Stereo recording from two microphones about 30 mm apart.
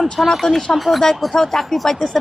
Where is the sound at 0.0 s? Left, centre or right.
Centre.